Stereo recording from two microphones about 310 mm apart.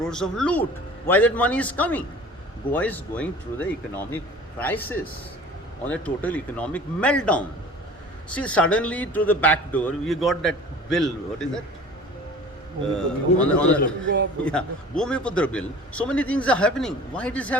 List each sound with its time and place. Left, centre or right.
0.0 s a man's voice: centre
13.0 s a man's voice: centre